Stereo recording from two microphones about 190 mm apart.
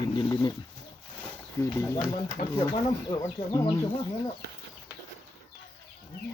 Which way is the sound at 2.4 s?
45° left (ahead or behind).